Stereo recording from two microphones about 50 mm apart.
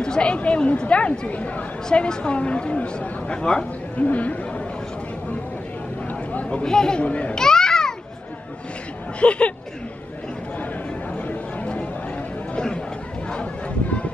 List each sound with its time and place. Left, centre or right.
0.0 s speech: centre
3.9 s speech: left
6.0 s a sound: left
6.6 s speech: centre
7.3 s music: centre
9.2 s speech: left
11.1 s a sound: left
12.5 s chatter: left
13.3 s a sound: left